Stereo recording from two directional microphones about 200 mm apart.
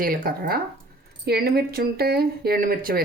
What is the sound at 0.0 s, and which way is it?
Speech, 45° right (ahead or behind).